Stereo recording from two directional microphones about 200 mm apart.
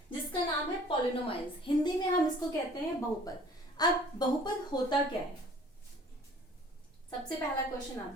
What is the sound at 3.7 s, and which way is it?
A woman's voice, 20° left (ahead or behind).